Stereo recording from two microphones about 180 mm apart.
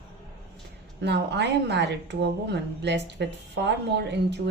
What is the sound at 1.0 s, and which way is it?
A woman's voice, 70° right (ahead or behind).